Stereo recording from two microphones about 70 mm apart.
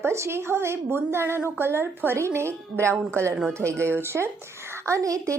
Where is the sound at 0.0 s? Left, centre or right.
Right.